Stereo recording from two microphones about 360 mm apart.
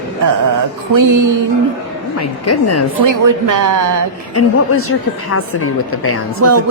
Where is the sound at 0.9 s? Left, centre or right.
Right.